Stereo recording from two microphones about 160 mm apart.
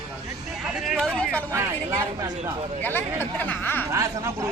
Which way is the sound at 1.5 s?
15° right (ahead or behind).